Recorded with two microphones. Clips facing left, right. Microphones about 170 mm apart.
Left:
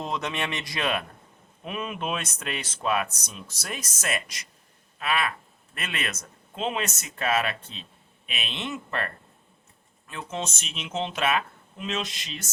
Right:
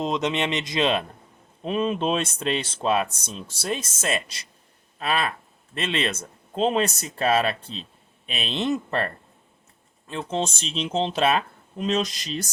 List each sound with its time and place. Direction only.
0.0 s speech: 20° right (ahead or behind); by 12.5 s 40° right (ahead or behind)